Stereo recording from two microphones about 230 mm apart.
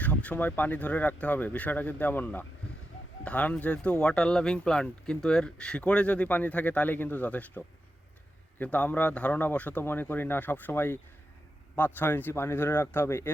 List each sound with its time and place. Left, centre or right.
0.0 s speech: centre